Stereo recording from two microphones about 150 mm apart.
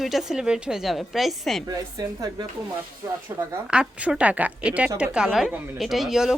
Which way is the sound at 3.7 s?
5° right (ahead or behind).